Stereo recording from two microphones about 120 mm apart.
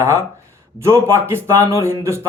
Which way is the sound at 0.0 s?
25° right (ahead or behind).